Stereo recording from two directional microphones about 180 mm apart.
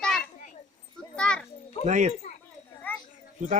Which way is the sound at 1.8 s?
40° right (ahead or behind).